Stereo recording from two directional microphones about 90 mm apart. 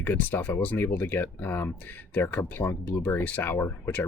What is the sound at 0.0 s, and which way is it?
Speech, 20° left (ahead or behind).